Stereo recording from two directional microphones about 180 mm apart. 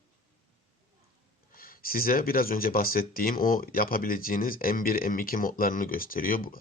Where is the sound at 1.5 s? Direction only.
55° left (ahead or behind).